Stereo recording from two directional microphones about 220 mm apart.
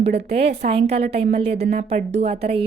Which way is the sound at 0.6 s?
30° right (ahead or behind).